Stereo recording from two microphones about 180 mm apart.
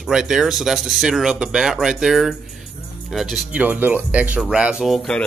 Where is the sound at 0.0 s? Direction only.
5° right (ahead or behind).